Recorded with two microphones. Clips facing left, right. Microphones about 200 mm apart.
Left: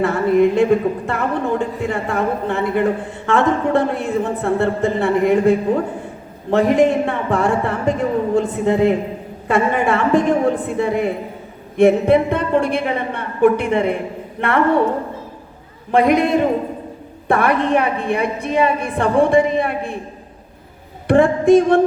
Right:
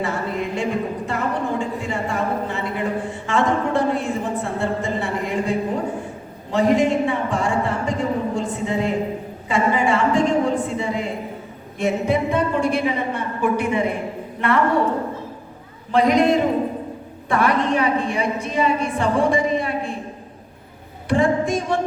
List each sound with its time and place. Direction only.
0.0 s a man's voice: 60° left (ahead or behind)
15.9 s a man's voice: 55° left (ahead or behind)
21.1 s a woman's voice: 55° left (ahead or behind)